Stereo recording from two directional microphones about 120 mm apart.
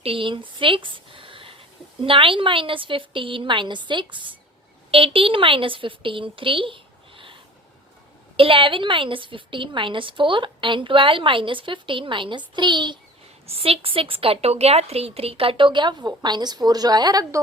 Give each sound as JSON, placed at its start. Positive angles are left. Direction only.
{"t": 0.0, "sound": "a woman's voice", "side_deg": -50}
{"t": 8.4, "sound": "a woman's voice", "side_deg": -45}
{"t": 13.5, "sound": "a woman's voice", "side_deg": -50}